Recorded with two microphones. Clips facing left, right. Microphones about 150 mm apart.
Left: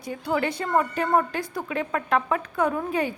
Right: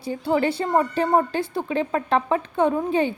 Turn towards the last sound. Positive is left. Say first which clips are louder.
# right 4 dB
turn(degrees=-25)  # may be behind; listen again after turning